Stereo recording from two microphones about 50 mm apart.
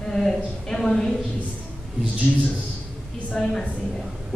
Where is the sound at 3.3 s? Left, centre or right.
Centre.